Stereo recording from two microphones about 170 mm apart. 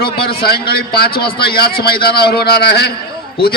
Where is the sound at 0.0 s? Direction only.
65° left (ahead or behind).